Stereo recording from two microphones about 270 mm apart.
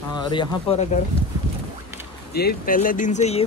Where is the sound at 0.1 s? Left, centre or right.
Centre.